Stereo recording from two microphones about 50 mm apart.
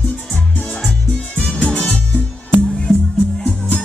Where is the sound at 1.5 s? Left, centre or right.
Centre.